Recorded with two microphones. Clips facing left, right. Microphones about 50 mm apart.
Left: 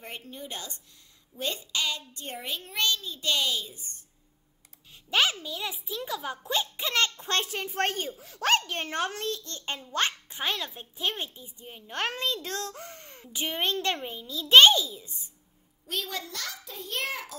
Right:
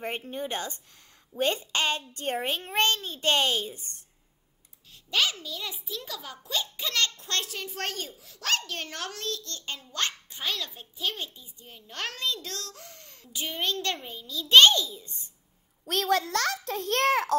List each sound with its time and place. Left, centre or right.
0.0 s a child's voice: right
5.1 s a child's voice: centre
15.9 s a child's voice: right